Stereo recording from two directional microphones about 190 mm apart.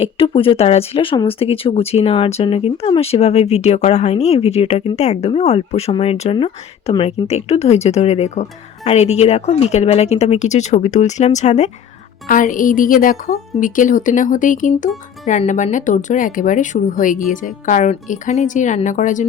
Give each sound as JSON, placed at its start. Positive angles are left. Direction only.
{"t": 0.0, "sound": "a woman's voice", "side_deg": 30}